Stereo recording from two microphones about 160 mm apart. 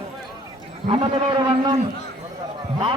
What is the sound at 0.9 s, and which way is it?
Speech, 35° right (ahead or behind).